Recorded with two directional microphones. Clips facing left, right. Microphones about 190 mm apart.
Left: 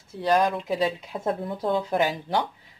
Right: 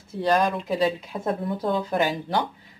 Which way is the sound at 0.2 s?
5° left (ahead or behind).